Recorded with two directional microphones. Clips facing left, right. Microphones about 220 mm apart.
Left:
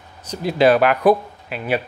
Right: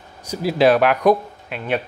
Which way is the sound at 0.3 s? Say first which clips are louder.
Even; 5° right (ahead or behind).